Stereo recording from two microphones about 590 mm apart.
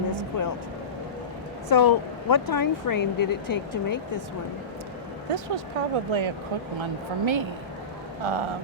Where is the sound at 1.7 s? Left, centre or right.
Left.